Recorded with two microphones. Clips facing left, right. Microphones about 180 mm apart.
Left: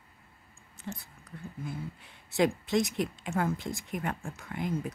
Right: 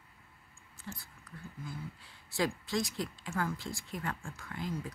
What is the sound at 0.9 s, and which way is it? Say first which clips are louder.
Speech: left 4 dB; 20° left (ahead or behind).